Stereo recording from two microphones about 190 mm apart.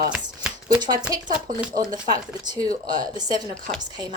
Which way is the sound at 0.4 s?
5° right (ahead or behind).